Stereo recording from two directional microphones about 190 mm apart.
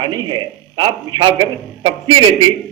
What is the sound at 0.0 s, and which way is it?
A man's voice, 25° right (ahead or behind).